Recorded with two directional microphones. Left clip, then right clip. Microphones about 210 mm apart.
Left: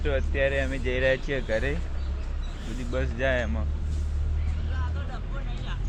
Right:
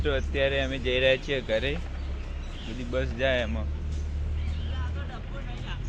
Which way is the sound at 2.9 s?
Centre (ahead or behind).